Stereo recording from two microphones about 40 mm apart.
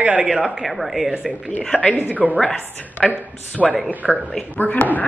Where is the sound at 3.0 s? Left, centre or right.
Left.